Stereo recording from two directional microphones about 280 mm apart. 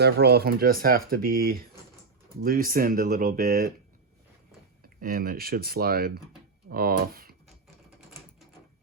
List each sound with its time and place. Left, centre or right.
0.0 s speech: right
4.8 s speech: right